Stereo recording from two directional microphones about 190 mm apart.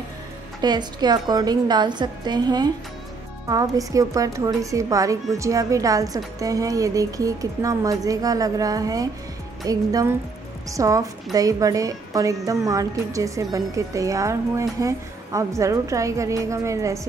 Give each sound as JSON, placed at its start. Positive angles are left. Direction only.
{"t": 0.6, "sound": "a woman's voice", "side_deg": -20}